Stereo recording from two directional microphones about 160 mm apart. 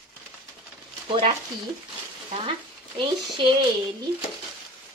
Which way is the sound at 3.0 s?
30° right (ahead or behind).